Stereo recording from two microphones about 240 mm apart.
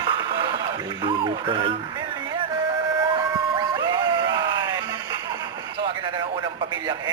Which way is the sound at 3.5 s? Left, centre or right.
Centre.